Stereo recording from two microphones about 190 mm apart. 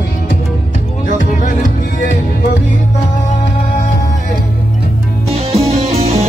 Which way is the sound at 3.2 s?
40° left (ahead or behind).